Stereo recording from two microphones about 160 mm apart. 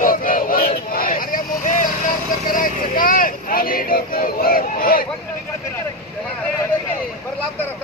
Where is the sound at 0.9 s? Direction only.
60° left (ahead or behind).